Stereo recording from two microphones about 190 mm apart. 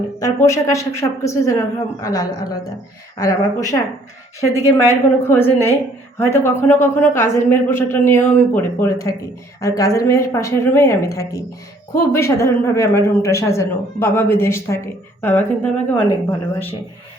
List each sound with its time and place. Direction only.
0.3 s speech: 15° left (ahead or behind)